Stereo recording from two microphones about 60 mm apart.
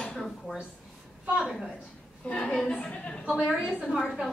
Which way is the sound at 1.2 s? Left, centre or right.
Centre.